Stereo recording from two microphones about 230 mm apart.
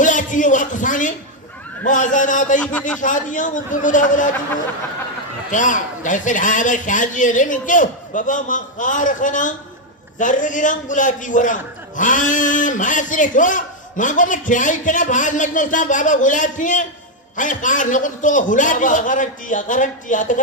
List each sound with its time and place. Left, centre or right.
0.0 s a man's voice: left
5.5 s a man's voice: left